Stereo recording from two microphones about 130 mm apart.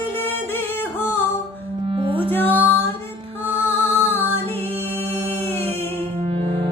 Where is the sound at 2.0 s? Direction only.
40° right (ahead or behind).